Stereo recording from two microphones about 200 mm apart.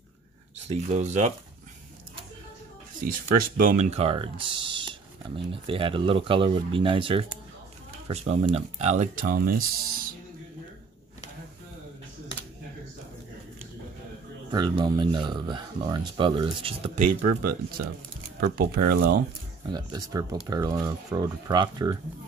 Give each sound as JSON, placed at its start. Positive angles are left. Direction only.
{"t": 0.7, "sound": "speech", "side_deg": -35}
{"t": 3.5, "sound": "speech", "side_deg": -40}
{"t": 14.5, "sound": "speech", "side_deg": -20}
{"t": 19.7, "sound": "speech", "side_deg": -20}